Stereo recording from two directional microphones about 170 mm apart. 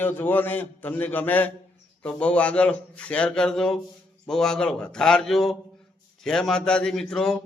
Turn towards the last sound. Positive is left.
turn(degrees=5)  # may be behind; listen again after turning